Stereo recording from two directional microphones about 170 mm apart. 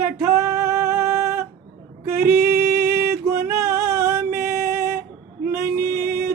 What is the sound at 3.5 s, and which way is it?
Music, 15° right (ahead or behind).